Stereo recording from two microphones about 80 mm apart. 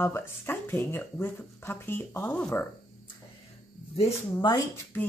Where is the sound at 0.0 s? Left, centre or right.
Left.